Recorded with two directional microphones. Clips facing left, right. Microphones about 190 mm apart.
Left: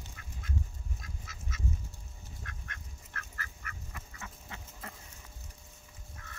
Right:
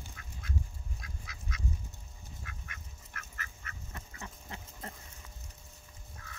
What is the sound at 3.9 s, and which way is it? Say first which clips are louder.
Duck: right 1 dB; 35° right (ahead or behind).